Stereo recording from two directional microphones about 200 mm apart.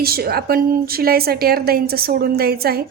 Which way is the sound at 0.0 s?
50° right (ahead or behind).